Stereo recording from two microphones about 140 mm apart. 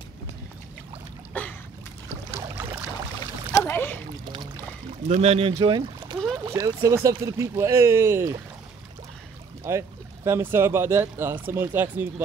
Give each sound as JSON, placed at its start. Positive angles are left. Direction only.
{"t": 1.3, "sound": "boat", "side_deg": 10}
{"t": 3.5, "sound": "splash", "side_deg": 15}
{"t": 5.0, "sound": "speech", "side_deg": -50}
{"t": 5.6, "sound": "speech", "side_deg": -30}
{"t": 9.7, "sound": "speech", "side_deg": -20}